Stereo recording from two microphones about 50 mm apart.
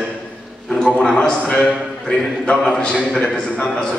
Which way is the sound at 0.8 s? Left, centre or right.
Left.